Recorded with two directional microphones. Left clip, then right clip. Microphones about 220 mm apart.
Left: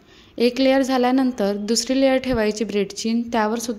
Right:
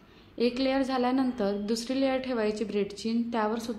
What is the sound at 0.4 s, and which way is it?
A woman's voice, 40° left (ahead or behind).